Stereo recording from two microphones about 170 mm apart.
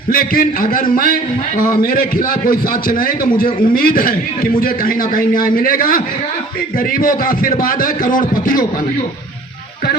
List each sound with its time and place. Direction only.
0.1 s a man's voice: 55° left (ahead or behind)